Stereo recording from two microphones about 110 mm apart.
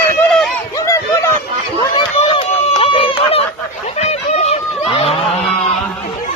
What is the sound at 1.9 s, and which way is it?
Run, 55° left (ahead or behind).